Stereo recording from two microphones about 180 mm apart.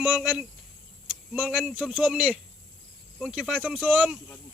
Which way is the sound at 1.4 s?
5° right (ahead or behind).